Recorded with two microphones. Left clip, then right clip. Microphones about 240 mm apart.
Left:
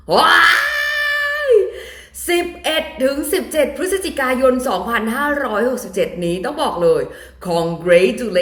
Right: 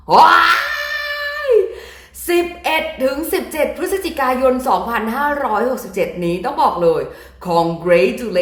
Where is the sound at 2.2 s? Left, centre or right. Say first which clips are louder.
Right 1 dB; right.